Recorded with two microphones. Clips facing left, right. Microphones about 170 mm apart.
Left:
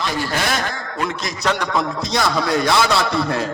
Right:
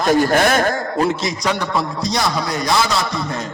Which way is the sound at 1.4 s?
10° right (ahead or behind).